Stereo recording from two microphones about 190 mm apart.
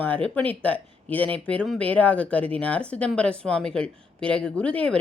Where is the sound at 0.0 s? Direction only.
10° left (ahead or behind).